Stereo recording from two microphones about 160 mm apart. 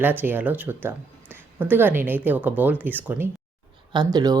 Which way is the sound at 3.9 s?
25° right (ahead or behind).